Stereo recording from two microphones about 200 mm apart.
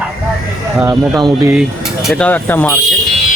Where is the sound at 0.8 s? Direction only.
15° right (ahead or behind).